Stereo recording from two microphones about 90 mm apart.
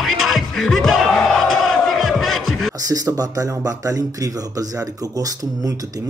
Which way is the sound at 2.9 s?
40° right (ahead or behind).